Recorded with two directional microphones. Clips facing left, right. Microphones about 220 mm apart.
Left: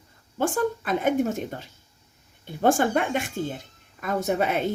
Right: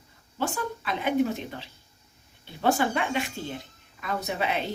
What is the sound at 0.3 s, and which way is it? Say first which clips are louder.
A woman's voice: left 6 dB; 50° left (ahead or behind).